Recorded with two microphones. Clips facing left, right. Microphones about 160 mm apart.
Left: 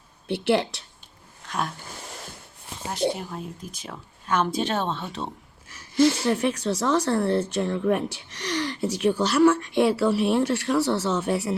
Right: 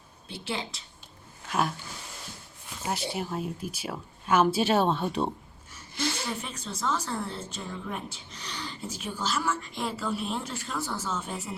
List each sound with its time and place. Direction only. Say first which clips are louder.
0.3 s speech: left 12 dB; 70° left (ahead or behind)
1.5 s roaring cats: right 1 dB; 5° right (ahead or behind)
2.9 s speech: left 5 dB; 5° right (ahead or behind)
5.6 s a sound: left 2 dB; 90° left
6.2 s speech: left 12 dB; 80° left